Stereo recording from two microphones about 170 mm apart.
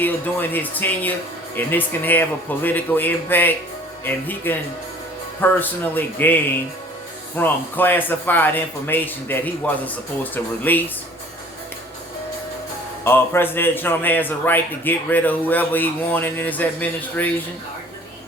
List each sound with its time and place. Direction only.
0.0 s a man's voice: 10° left (ahead or behind)
13.1 s a man's voice: 15° left (ahead or behind)